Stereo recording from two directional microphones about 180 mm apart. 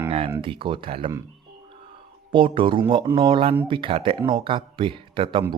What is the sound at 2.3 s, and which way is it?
Speech, 30° right (ahead or behind).